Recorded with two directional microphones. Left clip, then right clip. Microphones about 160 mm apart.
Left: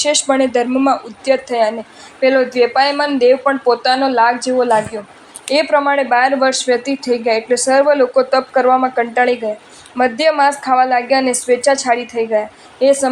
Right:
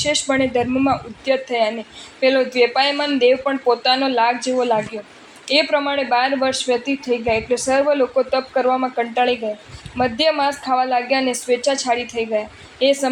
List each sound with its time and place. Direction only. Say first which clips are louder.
0.0 s a woman's voice: left 5 dB; 30° left (ahead or behind)